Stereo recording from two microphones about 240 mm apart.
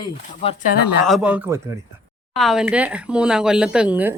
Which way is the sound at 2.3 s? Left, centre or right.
Centre.